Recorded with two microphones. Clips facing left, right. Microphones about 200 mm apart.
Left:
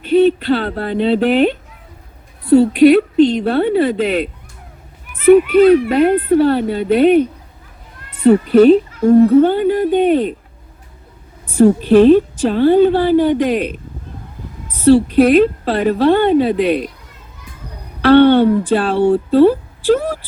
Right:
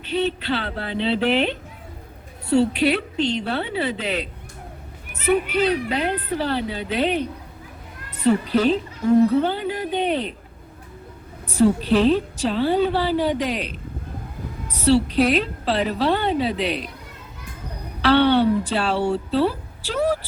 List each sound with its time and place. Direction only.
0.0 s a woman's voice: 50° left (ahead or behind)
11.4 s a woman's voice: 50° left (ahead or behind)
18.0 s a woman's voice: 50° left (ahead or behind)